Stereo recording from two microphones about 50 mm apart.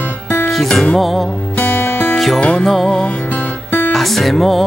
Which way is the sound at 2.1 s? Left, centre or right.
Centre.